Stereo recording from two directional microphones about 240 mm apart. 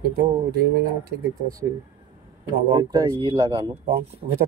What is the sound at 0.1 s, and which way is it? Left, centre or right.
Speech, right.